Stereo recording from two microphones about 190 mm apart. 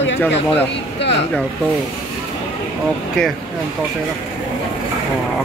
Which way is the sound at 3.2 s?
5° left (ahead or behind).